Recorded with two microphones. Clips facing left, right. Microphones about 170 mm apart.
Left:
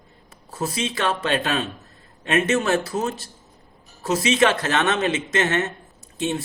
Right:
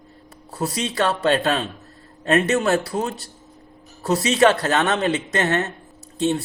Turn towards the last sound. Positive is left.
turn(degrees=-35)  # may be behind; listen again after turning